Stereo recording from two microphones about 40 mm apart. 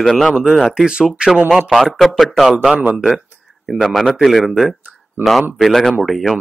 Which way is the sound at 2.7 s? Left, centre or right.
Right.